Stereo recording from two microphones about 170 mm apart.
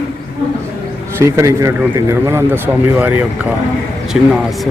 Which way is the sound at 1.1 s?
15° right (ahead or behind).